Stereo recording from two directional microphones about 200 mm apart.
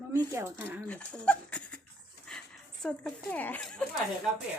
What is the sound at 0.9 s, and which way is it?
Speech, 5° left (ahead or behind).